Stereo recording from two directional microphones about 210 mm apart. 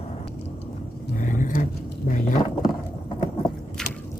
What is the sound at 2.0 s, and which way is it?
Speech, 35° left (ahead or behind).